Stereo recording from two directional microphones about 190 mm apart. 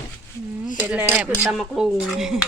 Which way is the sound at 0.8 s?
10° right (ahead or behind).